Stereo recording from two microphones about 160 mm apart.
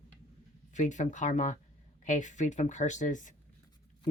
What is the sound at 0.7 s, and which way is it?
Speech, 50° left (ahead or behind).